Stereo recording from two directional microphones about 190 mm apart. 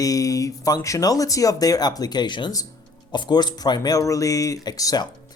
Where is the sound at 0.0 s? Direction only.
20° left (ahead or behind).